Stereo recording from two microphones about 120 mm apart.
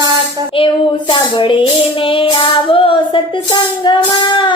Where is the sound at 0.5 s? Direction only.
45° left (ahead or behind).